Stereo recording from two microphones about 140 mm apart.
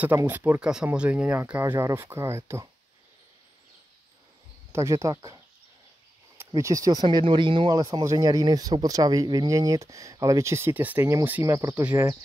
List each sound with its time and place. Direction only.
0.0 s speech: 15° right (ahead or behind)
4.7 s speech: 20° right (ahead or behind)